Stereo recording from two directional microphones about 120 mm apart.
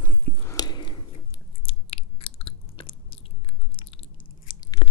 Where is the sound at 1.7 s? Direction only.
50° left (ahead or behind).